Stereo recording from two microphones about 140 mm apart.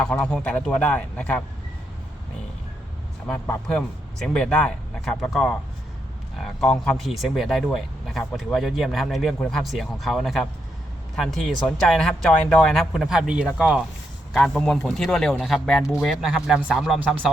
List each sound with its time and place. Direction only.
0.0 s a man's voice: 5° left (ahead or behind)
3.2 s a man's voice: 15° left (ahead or behind)
3.8 s speech: 5° left (ahead or behind)